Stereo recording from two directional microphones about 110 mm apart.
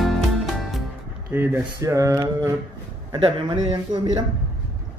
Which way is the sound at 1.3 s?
20° right (ahead or behind).